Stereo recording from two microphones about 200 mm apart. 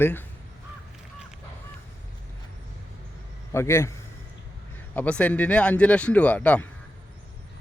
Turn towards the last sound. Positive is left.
turn(degrees=5)  # may be behind; listen again after turning